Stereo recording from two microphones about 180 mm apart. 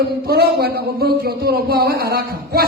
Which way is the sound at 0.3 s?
60° right (ahead or behind).